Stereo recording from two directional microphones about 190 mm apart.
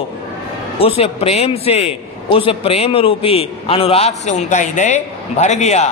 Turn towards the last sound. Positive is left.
turn(degrees=35)  # may be behind; listen again after turning